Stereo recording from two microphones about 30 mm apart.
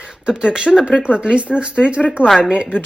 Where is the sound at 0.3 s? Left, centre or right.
Right.